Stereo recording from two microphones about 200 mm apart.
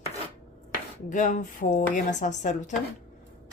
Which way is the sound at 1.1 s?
40° left (ahead or behind).